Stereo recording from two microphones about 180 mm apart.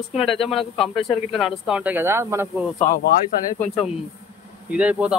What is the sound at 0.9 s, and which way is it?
Speech, 30° left (ahead or behind).